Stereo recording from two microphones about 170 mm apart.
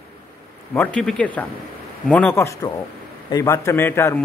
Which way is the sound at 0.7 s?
10° left (ahead or behind).